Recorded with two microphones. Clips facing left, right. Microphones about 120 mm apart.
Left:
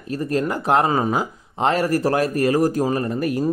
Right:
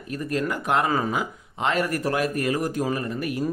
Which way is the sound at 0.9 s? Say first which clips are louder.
Left 4 dB; 25° left (ahead or behind).